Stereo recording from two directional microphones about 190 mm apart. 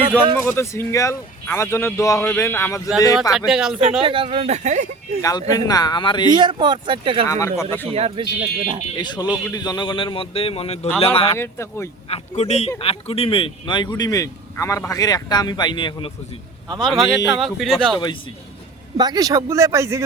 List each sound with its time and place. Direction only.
0.4 s speech: 15° left (ahead or behind)
3.3 s speech: 5° right (ahead or behind)
4.0 s speech: 25° right (ahead or behind)
5.2 s speech: 20° left (ahead or behind)
6.3 s speech: 25° right (ahead or behind)
7.3 s speech: 15° left (ahead or behind)
7.9 s speech: 30° right (ahead or behind)
9.0 s speech: 20° left (ahead or behind)
11.3 s speech: 15° left (ahead or behind)
12.0 s speech: 35° left (ahead or behind)
16.7 s speech: 5° left (ahead or behind)
17.9 s speech: 25° left (ahead or behind)
18.9 s speech: 20° right (ahead or behind)